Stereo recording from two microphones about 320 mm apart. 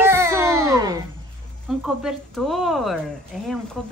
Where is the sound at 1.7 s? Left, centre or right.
Centre.